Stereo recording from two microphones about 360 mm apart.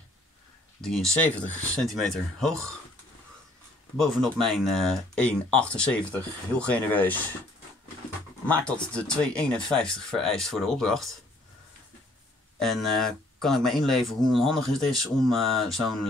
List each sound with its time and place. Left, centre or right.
0.7 s speech: centre
3.9 s speech: centre
8.5 s speech: centre
12.5 s speech: centre